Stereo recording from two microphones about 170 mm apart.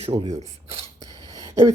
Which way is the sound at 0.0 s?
35° right (ahead or behind).